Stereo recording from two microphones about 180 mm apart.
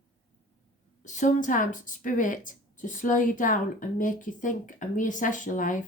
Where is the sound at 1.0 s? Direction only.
45° left (ahead or behind).